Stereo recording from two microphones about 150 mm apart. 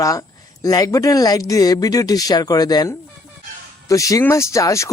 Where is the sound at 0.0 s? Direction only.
25° left (ahead or behind).